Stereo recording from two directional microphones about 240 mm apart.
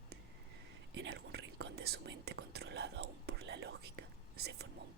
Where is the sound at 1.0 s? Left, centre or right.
Right.